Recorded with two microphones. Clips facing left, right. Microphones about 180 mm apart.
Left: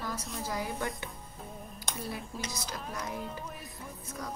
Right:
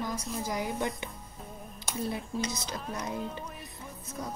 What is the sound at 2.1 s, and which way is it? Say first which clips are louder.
A woman's voice: right 5 dB; 20° right (ahead or behind).